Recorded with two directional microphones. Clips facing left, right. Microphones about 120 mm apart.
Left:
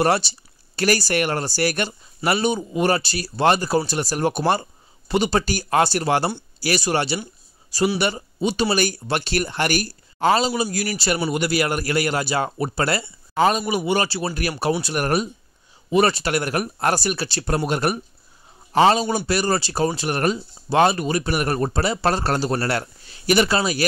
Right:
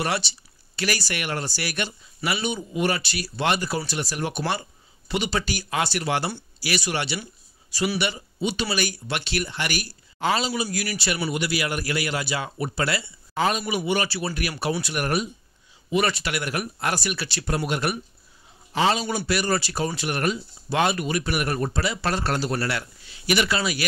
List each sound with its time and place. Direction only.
0.0 s speech: 40° left (ahead or behind)